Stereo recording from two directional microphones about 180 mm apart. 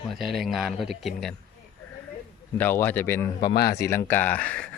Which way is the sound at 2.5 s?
10° left (ahead or behind).